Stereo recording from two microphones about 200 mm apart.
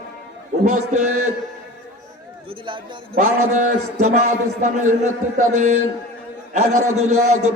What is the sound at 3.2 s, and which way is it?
A man's voice, 40° right (ahead or behind).